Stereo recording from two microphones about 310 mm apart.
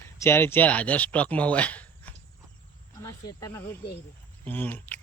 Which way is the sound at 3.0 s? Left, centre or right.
Centre.